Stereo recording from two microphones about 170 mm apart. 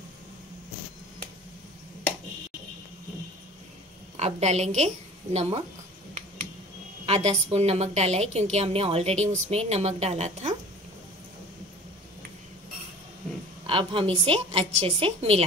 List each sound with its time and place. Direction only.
4.2 s a woman's voice: 40° right (ahead or behind)
7.1 s a woman's voice: 40° right (ahead or behind)
13.7 s a woman's voice: 30° right (ahead or behind)